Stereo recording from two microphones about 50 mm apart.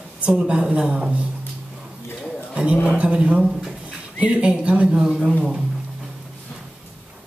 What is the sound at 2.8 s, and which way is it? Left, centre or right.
Speech, right.